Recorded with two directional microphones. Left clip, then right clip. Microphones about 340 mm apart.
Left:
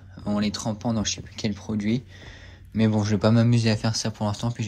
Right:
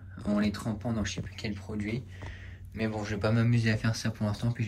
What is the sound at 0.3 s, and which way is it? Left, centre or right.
Speech, centre.